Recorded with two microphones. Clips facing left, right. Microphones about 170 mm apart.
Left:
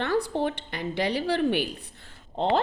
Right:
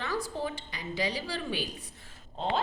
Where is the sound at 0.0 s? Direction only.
65° left (ahead or behind).